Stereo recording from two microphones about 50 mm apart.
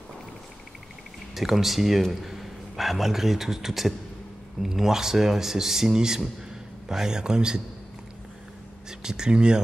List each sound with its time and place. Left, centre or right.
1.3 s a man's voice: centre
9.0 s speech: centre